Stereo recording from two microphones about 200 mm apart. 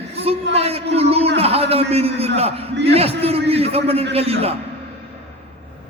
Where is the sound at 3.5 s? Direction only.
30° right (ahead or behind).